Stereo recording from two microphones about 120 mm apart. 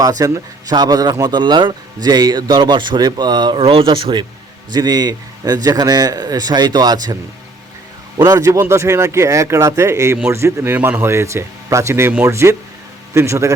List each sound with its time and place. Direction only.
0.0 s speech: 30° right (ahead or behind)
3.6 s speech: 50° right (ahead or behind)
8.2 s speech: 30° right (ahead or behind)